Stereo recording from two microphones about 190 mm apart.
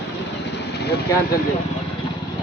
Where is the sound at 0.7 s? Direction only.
60° left (ahead or behind).